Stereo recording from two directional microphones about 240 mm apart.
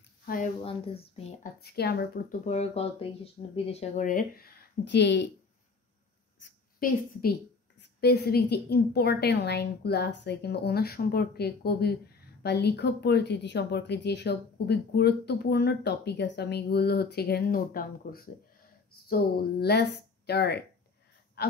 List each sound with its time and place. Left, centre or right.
0.2 s a sound: left
0.7 s speech: left
1.6 s a woman's voice: left
6.4 s a woman's voice: left
21.4 s gasp: left